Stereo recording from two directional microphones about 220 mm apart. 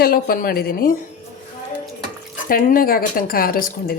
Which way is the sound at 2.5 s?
40° left (ahead or behind).